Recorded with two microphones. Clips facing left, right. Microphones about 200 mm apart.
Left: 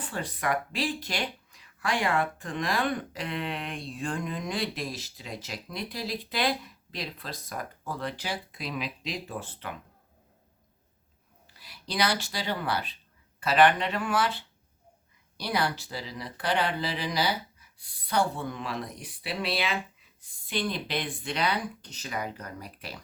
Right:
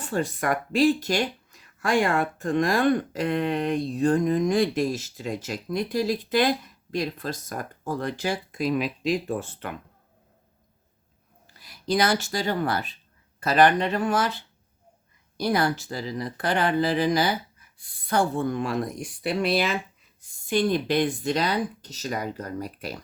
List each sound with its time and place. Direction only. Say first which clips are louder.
0.0 s speech: right 6 dB; 45° right (ahead or behind)
11.5 s speech: right 8 dB; 45° right (ahead or behind)